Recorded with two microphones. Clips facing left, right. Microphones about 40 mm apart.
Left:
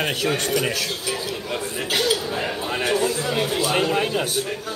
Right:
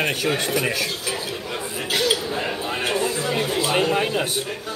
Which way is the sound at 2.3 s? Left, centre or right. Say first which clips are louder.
Even; centre.